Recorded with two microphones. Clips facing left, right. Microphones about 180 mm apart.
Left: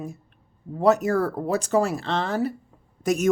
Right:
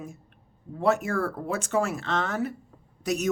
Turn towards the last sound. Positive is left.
turn(degrees=50)  # may be behind; listen again after turning